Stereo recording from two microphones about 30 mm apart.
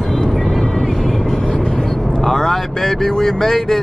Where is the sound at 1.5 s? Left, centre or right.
Left.